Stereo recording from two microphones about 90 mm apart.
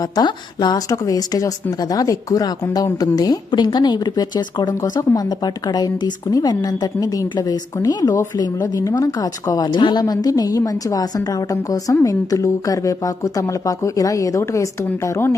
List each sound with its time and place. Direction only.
0.2 s speech: 50° left (ahead or behind)
4.7 s speech: 35° left (ahead or behind)
8.6 s speech: 35° left (ahead or behind)
9.7 s a woman's voice: 65° left (ahead or behind)
10.0 s a woman's voice: 45° left (ahead or behind)